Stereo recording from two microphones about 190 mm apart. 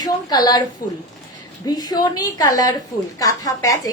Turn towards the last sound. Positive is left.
turn(degrees=15)  # may be behind; listen again after turning